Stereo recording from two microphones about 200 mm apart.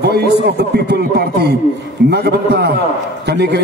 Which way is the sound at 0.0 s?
55° right (ahead or behind).